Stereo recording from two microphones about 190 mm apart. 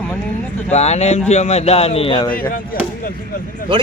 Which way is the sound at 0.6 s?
35° left (ahead or behind).